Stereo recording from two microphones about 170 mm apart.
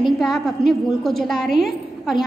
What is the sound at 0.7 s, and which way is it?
A woman's voice, centre (ahead or behind).